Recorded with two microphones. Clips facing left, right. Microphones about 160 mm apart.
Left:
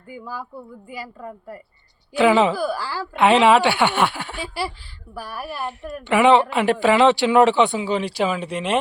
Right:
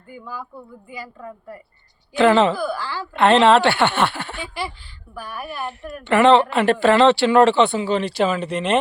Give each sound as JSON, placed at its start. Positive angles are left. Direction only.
{"t": 0.9, "sound": "speech", "side_deg": 15}
{"t": 2.7, "sound": "a woman's voice", "side_deg": 35}
{"t": 3.2, "sound": "speech", "side_deg": 10}
{"t": 4.4, "sound": "a woman's voice", "side_deg": 35}
{"t": 5.2, "sound": "a woman's voice", "side_deg": 5}